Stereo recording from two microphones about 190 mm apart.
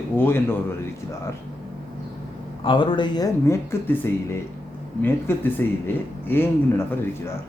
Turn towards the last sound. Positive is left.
turn(degrees=10)  # may be behind; listen again after turning